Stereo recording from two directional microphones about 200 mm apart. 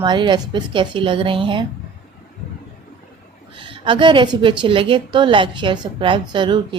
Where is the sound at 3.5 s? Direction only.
25° right (ahead or behind).